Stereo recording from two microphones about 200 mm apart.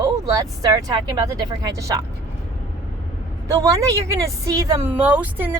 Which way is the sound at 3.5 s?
15° right (ahead or behind).